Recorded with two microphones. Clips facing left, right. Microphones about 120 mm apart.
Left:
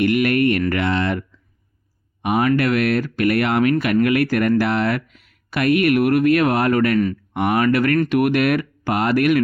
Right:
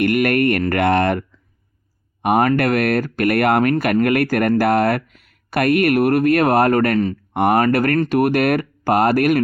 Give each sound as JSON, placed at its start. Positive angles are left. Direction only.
{"t": 0.0, "sound": "speech", "side_deg": -50}
{"t": 2.2, "sound": "speech", "side_deg": -50}